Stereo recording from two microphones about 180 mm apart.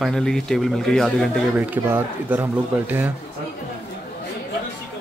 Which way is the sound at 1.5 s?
10° right (ahead or behind).